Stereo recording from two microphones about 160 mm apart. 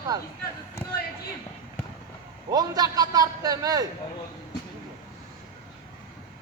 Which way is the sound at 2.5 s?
25° right (ahead or behind).